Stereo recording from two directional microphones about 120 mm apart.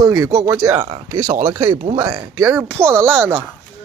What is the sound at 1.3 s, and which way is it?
Speech, 55° right (ahead or behind).